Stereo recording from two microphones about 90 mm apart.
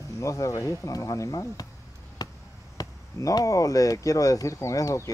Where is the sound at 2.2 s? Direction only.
45° left (ahead or behind).